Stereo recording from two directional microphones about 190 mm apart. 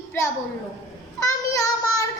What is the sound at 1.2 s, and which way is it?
Child singing, 15° left (ahead or behind).